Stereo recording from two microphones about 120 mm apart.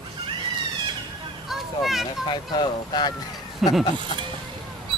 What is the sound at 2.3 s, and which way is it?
Speech, 35° left (ahead or behind).